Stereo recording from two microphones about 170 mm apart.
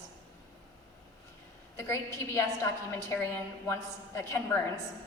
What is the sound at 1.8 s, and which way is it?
A woman's voice, 15° left (ahead or behind).